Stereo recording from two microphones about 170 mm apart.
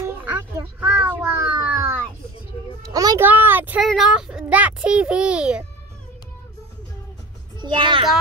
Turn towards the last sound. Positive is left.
turn(degrees=-25)  # may be behind; listen again after turning